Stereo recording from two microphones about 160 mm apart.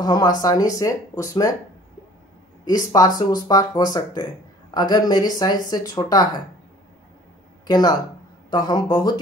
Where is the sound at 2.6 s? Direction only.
25° left (ahead or behind).